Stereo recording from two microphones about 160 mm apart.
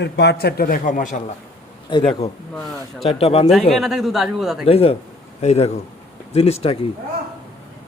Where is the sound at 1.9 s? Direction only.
30° left (ahead or behind).